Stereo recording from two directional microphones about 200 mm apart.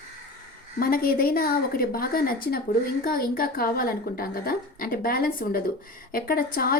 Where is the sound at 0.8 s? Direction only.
45° left (ahead or behind).